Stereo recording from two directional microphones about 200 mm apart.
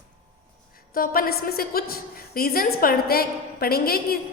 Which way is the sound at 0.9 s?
45° left (ahead or behind).